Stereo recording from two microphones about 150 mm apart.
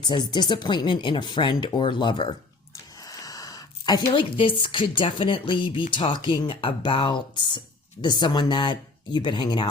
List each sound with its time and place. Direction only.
0.0 s speech: 30° left (ahead or behind)